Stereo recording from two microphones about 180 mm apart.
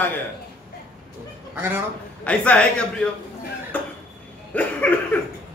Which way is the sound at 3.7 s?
10° left (ahead or behind).